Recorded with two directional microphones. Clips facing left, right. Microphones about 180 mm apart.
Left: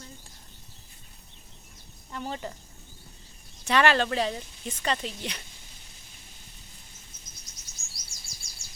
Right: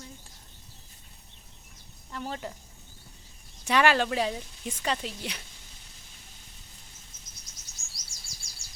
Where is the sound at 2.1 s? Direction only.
Centre (ahead or behind).